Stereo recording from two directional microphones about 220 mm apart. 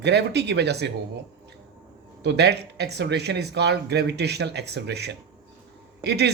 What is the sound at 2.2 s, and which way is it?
Speech, 50° right (ahead or behind).